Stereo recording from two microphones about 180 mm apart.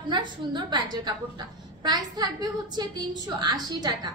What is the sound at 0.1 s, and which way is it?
A woman's voice, 25° right (ahead or behind).